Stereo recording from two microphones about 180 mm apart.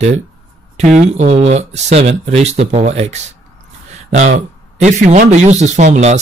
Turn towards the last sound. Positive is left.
turn(degrees=-40)  # may be behind; listen again after turning